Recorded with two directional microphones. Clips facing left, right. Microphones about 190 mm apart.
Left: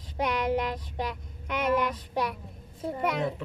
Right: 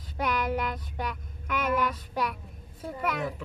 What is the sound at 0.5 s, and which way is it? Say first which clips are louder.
Speech: left 2 dB; 25° left (ahead or behind).